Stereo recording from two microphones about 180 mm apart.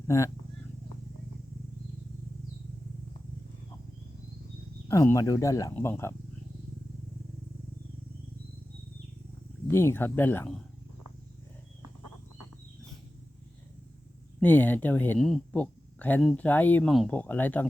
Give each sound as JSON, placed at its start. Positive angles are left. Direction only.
{"t": 4.9, "sound": "speech", "side_deg": 15}
{"t": 9.6, "sound": "speech", "side_deg": 15}
{"t": 14.4, "sound": "speech", "side_deg": 10}